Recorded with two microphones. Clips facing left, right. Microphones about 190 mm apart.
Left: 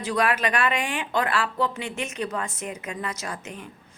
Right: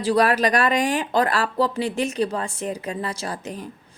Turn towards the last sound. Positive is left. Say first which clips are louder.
# right 5 dB
turn(degrees=-35)  # may be behind; listen again after turning